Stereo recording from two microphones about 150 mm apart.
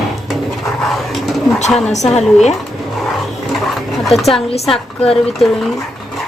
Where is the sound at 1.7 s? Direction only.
5° left (ahead or behind).